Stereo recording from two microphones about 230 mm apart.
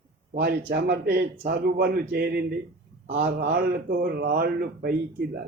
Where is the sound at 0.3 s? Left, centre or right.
Right.